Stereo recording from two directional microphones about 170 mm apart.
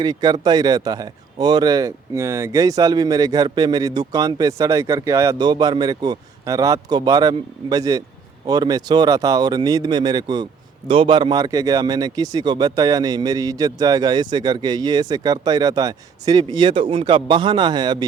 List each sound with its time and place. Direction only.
0.0 s speech: 25° right (ahead or behind)